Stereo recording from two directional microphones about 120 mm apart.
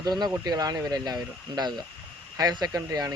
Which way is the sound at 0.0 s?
35° right (ahead or behind).